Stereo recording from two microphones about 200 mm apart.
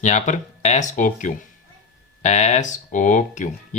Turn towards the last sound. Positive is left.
turn(degrees=40)  # may be behind; listen again after turning